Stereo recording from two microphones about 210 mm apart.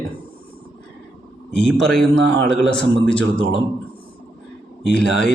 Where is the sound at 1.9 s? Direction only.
55° right (ahead or behind).